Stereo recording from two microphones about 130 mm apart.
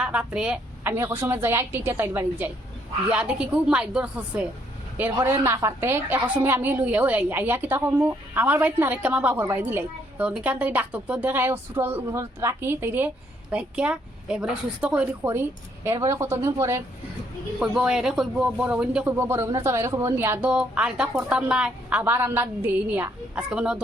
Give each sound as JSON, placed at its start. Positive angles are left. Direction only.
{"t": 0.0, "sound": "a woman's voice", "side_deg": -10}
{"t": 5.2, "sound": "a woman's voice", "side_deg": -20}
{"t": 15.3, "sound": "a woman's voice", "side_deg": -20}
{"t": 17.6, "sound": "a woman's voice", "side_deg": -5}
{"t": 20.5, "sound": "a woman's voice", "side_deg": -10}